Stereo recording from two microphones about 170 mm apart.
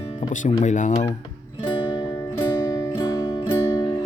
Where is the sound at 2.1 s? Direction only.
15° left (ahead or behind).